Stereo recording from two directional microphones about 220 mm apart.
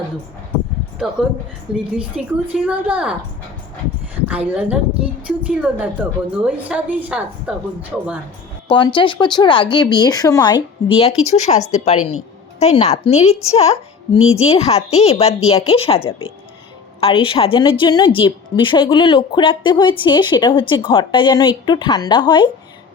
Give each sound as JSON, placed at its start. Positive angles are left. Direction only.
{"t": 1.0, "sound": "a woman's voice", "side_deg": 0}
{"t": 8.7, "sound": "a woman's voice", "side_deg": 20}